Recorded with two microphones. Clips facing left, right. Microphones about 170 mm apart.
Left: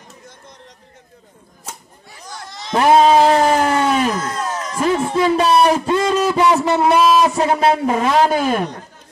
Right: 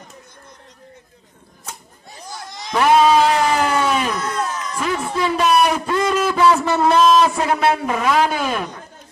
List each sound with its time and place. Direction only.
2.7 s a sound: 35° left (ahead or behind)
4.9 s music: 25° left (ahead or behind)
5.2 s a man's voice: 30° left (ahead or behind); by 7.2 s 10° left (ahead or behind)
7.2 s speech: 25° left (ahead or behind)